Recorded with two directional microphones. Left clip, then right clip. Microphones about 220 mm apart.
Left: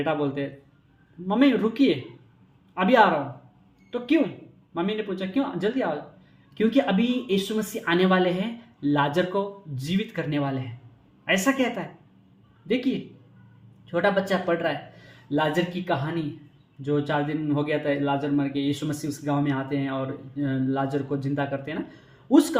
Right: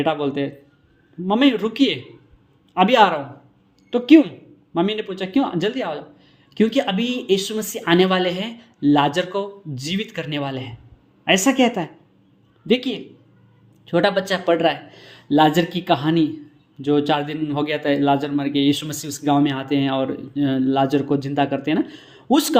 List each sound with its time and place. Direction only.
0.0 s a man's voice: 35° right (ahead or behind)